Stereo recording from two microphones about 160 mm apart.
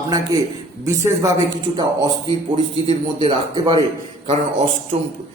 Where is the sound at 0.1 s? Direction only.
20° right (ahead or behind).